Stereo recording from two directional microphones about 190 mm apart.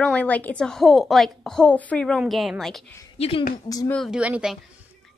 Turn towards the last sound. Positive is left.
turn(degrees=-5)  # may be behind; listen again after turning